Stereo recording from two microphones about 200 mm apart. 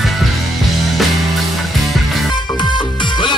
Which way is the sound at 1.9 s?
Centre (ahead or behind).